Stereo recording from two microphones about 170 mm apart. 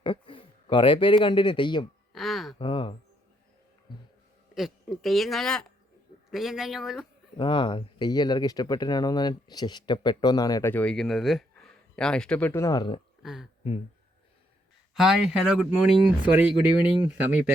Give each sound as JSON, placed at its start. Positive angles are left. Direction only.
{"t": 0.0, "sound": "speech", "side_deg": 30}
{"t": 2.1, "sound": "a sound", "side_deg": 0}
{"t": 2.6, "sound": "a sound", "side_deg": 30}
{"t": 4.5, "sound": "speech", "side_deg": 0}
{"t": 7.3, "sound": "speech", "side_deg": 30}
{"t": 13.2, "sound": "speech", "side_deg": 0}
{"t": 14.9, "sound": "speech", "side_deg": -5}